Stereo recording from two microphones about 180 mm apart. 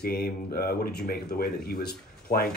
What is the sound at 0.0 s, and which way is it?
Speech, 55° left (ahead or behind).